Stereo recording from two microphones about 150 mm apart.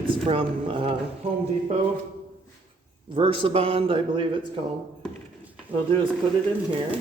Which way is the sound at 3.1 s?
35° right (ahead or behind).